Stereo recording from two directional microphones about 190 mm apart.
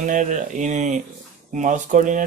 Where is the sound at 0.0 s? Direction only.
40° right (ahead or behind).